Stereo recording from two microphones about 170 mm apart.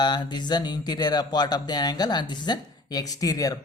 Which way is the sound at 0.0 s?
25° left (ahead or behind).